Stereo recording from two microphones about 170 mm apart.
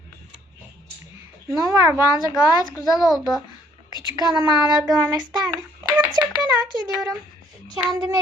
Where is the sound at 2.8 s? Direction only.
20° left (ahead or behind).